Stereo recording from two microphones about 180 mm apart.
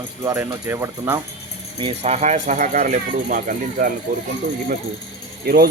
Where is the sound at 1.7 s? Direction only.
30° right (ahead or behind); by 3.9 s 45° right (ahead or behind).